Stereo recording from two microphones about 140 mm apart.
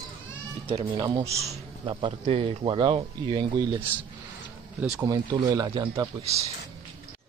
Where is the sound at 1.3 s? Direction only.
50° right (ahead or behind); by 3.8 s 35° right (ahead or behind).